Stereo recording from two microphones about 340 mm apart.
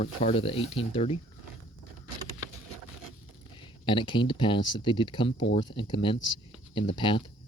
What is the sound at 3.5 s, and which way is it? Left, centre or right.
Speech, centre.